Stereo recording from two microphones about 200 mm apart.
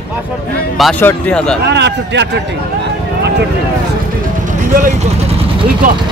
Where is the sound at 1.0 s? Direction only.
5° left (ahead or behind).